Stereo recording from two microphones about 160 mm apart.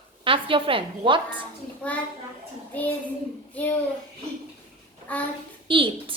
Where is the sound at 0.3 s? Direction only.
35° right (ahead or behind).